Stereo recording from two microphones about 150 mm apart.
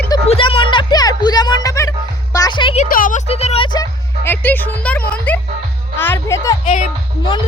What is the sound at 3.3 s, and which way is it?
Music, 45° left (ahead or behind).